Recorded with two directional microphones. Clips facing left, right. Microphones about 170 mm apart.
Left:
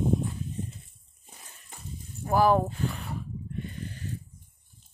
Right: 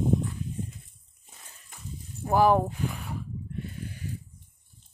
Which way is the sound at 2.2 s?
15° right (ahead or behind).